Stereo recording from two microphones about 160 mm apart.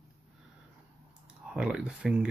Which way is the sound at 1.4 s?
5° right (ahead or behind).